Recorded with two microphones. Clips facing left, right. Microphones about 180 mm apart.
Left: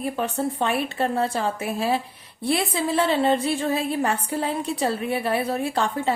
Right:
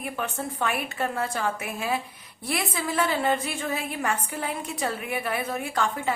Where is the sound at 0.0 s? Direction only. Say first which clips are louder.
Left 6 dB; 35° left (ahead or behind).